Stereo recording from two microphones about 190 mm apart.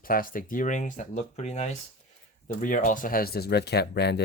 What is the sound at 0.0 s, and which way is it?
Speech, 50° left (ahead or behind).